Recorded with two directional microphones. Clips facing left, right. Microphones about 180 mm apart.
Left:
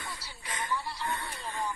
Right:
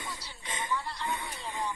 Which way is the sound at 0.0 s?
20° right (ahead or behind).